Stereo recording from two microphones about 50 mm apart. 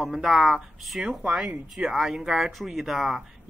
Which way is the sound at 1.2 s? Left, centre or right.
Centre.